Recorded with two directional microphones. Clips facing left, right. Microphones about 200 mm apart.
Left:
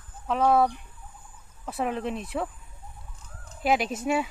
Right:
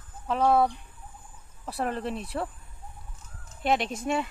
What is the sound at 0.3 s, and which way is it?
Speech, centre (ahead or behind).